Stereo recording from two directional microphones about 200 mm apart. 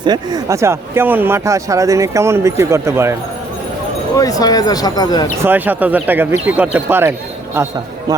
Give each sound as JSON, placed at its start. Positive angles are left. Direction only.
{"t": 0.0, "sound": "speech", "side_deg": -20}
{"t": 4.1, "sound": "speech", "side_deg": 20}
{"t": 5.4, "sound": "speech", "side_deg": -10}